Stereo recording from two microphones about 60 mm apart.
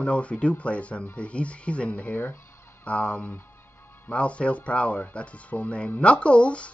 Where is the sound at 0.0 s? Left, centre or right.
Left.